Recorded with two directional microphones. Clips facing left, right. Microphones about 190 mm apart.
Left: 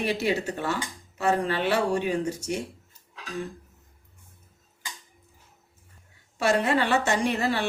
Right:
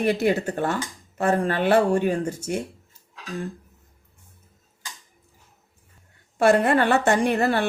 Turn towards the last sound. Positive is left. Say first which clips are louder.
# right 4 dB
turn(degrees=-55)  # may be behind; listen again after turning